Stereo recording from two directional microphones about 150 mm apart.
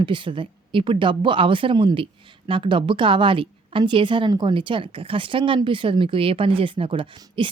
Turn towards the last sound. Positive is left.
turn(degrees=-35)  # may be behind; listen again after turning